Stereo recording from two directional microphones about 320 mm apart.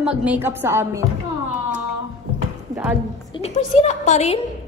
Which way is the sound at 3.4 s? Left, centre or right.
Left.